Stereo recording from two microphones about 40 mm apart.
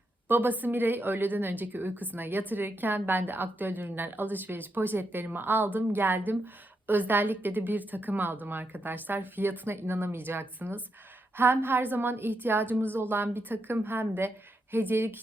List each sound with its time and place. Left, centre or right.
0.3 s a woman's voice: right